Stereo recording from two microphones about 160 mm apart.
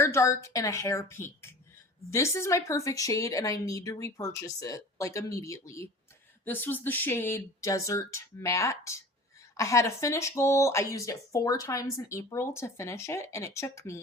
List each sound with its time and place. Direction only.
0.0 s speech: 15° left (ahead or behind)